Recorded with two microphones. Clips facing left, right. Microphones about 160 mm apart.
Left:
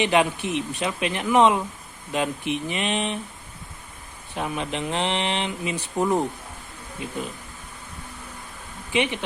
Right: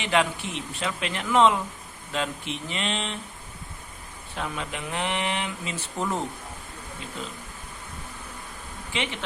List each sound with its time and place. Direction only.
0.0 s speech: 20° left (ahead or behind)
4.4 s speech: 20° left (ahead or behind)
5.7 s speech: 15° left (ahead or behind)
8.9 s speech: 15° left (ahead or behind)